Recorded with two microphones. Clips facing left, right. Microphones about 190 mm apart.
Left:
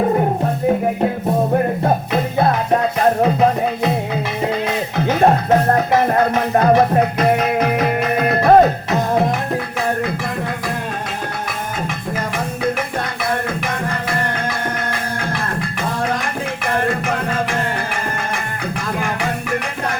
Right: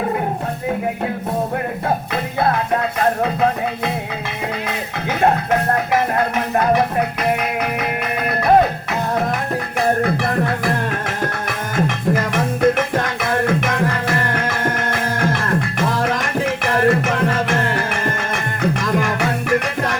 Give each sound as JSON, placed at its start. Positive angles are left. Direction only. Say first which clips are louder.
{"t": 6.6, "sound": "music", "louder": "left 4 dB", "side_deg": 40}
{"t": 16.8, "sound": "music", "louder": "right 4 dB", "side_deg": -55}